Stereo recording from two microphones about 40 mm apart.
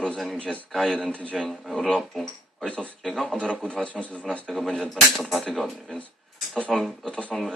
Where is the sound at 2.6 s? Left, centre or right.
Left.